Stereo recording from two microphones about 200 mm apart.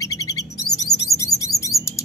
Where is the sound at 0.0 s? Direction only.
15° left (ahead or behind).